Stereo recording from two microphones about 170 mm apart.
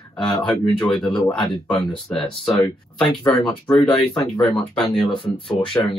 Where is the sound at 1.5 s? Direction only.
25° left (ahead or behind).